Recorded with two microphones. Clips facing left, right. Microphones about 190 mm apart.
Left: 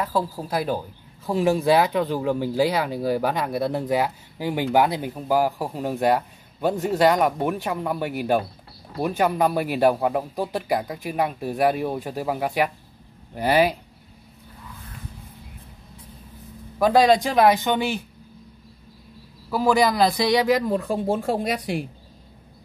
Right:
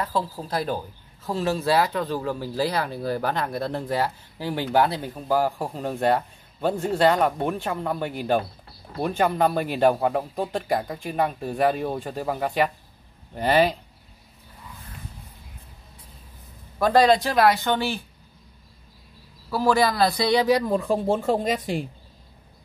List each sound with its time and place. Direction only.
0.0 s speech: 10° left (ahead or behind)
16.7 s speech: 15° left (ahead or behind)
19.6 s speech: 15° left (ahead or behind)